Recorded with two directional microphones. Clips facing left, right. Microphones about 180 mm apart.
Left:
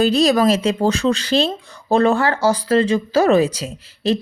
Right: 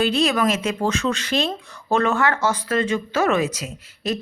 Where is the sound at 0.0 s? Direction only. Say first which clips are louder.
Left 5 dB; 40° left (ahead or behind).